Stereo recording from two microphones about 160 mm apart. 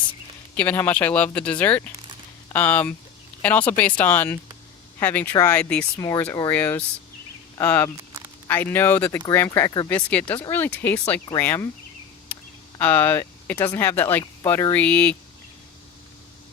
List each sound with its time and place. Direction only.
0.5 s speech: 10° left (ahead or behind)
6.0 s speech: 20° left (ahead or behind)
6.5 s speech: 10° left (ahead or behind)
12.8 s speech: 10° left (ahead or behind)